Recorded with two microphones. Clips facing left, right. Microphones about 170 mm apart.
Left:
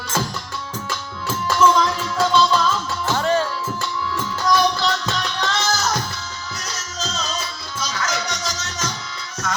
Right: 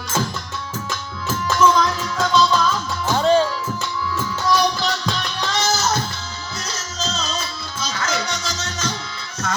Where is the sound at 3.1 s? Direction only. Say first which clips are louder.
Right 4 dB; 15° right (ahead or behind).